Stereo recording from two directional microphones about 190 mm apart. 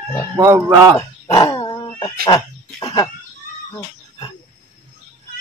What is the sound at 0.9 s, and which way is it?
Dog, 20° left (ahead or behind).